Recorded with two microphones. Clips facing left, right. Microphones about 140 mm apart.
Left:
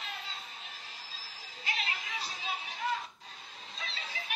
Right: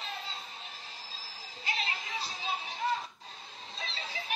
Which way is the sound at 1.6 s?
30° right (ahead or behind).